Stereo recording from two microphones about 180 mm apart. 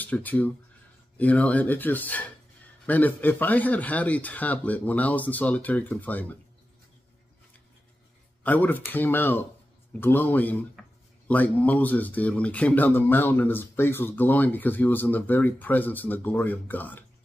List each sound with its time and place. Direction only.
0.0 s speech: 10° left (ahead or behind)
8.5 s speech: 10° left (ahead or behind)